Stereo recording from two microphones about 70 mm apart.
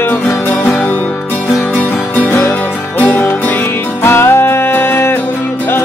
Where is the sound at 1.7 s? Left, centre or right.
Left.